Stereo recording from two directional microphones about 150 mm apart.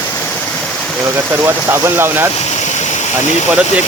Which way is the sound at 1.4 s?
15° right (ahead or behind).